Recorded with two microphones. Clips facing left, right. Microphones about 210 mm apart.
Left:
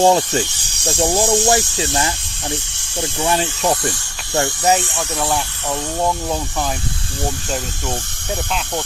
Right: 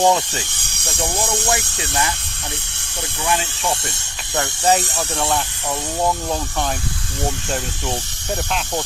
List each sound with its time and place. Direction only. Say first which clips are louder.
0.0 s speech: left 3 dB; 25° left (ahead or behind)
0.9 s speech: left 7 dB; 60° left (ahead or behind)
3.2 s speech: left 3 dB; 35° left (ahead or behind)
4.9 s speech: left 1 dB; 5° left (ahead or behind)